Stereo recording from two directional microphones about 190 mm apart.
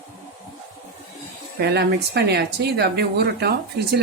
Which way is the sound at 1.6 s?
60° right (ahead or behind).